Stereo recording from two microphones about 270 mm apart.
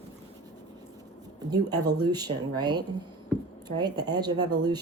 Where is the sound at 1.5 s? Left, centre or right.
Centre.